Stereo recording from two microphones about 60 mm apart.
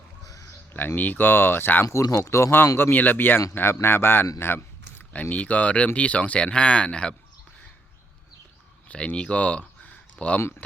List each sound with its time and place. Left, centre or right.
0.4 s speech: left
1.9 s speech: left
2.7 s a man's voice: left
4.4 s a sound: left
5.1 s speech: left
8.9 s speech: centre